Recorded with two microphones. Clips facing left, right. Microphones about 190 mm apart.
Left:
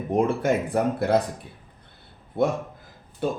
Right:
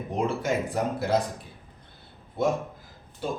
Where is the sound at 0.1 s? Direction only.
55° left (ahead or behind).